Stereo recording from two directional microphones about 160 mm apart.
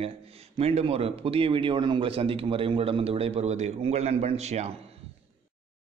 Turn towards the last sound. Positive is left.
turn(degrees=-45)  # may be behind; listen again after turning